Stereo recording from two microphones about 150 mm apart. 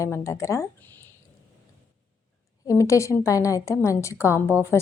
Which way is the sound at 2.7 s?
20° left (ahead or behind).